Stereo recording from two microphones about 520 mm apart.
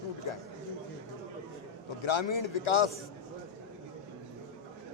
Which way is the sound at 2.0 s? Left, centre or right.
Left.